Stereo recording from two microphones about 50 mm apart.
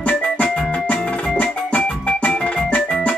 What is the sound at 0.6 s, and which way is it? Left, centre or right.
Music, left.